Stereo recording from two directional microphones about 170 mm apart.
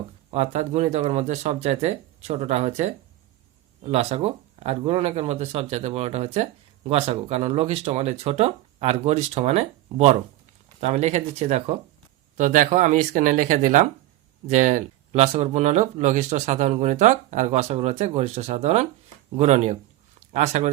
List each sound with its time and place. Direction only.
0.3 s speech: 40° right (ahead or behind)
12.4 s speech: 50° right (ahead or behind)